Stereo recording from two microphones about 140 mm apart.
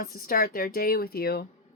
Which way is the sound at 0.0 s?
90° left.